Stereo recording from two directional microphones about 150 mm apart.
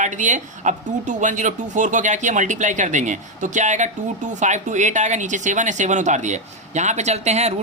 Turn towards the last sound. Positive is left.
turn(degrees=-45)  # may be behind; listen again after turning